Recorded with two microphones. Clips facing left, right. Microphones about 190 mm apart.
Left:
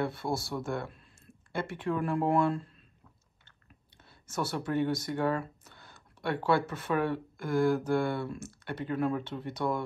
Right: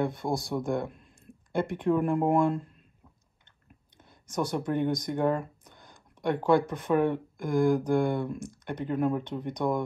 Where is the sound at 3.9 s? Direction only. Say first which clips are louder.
Right 4 dB; 15° right (ahead or behind).